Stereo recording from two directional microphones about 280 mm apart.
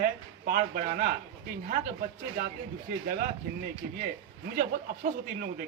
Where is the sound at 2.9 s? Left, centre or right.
Right.